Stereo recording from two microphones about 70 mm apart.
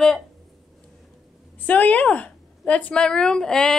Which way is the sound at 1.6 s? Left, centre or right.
Left.